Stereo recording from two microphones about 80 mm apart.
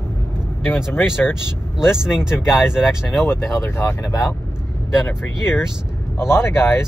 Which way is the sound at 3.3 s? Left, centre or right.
Left.